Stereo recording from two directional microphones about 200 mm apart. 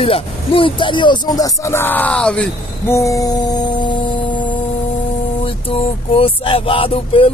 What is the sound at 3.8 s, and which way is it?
Music, 25° left (ahead or behind).